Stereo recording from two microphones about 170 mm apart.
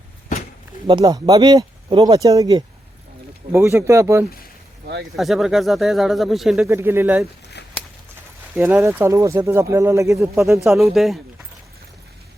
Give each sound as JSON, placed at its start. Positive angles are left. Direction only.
{"t": 0.9, "sound": "speech", "side_deg": -25}
{"t": 5.1, "sound": "speech", "side_deg": 0}
{"t": 6.7, "sound": "speech", "side_deg": -15}
{"t": 7.6, "sound": "a sound", "side_deg": 90}
{"t": 8.5, "sound": "speech", "side_deg": -10}
{"t": 10.6, "sound": "speech", "side_deg": 0}